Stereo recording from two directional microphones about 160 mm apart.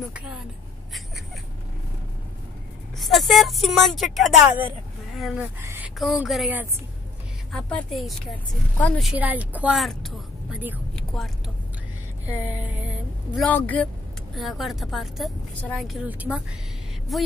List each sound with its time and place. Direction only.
3.0 s speech: centre (ahead or behind)
5.6 s a sound: 15° right (ahead or behind)
5.9 s a woman's voice: 5° right (ahead or behind)
9.1 s a woman's voice: 10° right (ahead or behind)
11.0 s vehicle: 5° left (ahead or behind)
12.3 s a woman's voice: 10° right (ahead or behind)
13.5 s a woman's voice: 10° left (ahead or behind)
14.3 s a woman's voice: centre (ahead or behind)